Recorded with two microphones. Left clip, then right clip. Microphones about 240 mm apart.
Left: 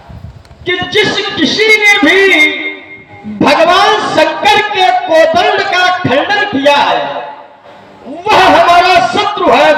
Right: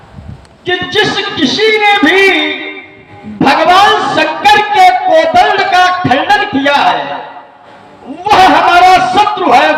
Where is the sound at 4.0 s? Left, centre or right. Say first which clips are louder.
Even; right.